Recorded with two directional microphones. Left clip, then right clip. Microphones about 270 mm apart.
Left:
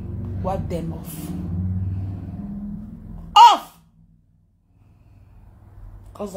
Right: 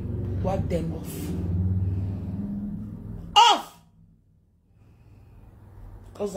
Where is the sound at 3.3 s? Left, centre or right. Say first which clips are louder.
Left 7 dB; left.